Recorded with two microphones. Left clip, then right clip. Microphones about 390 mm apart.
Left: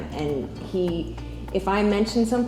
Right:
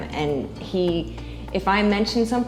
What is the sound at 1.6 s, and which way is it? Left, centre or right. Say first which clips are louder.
Speech: right 3 dB; centre.